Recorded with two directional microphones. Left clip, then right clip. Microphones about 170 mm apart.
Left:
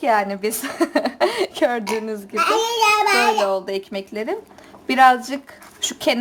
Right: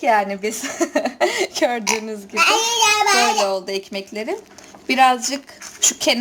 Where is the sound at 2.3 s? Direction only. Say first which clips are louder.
Right 2 dB; 60° left (ahead or behind).